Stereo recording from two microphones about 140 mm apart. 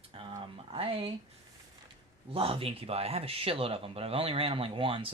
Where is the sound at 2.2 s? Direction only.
40° right (ahead or behind).